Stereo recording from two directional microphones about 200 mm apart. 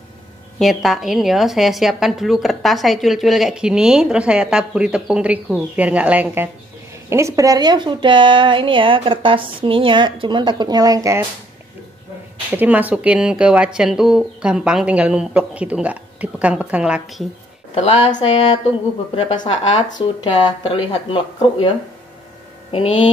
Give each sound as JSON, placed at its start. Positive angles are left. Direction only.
{"t": 0.6, "sound": "a woman's voice", "side_deg": 0}
{"t": 12.4, "sound": "a woman's voice", "side_deg": -10}
{"t": 17.7, "sound": "a sound", "side_deg": 30}
{"t": 19.1, "sound": "speech", "side_deg": 25}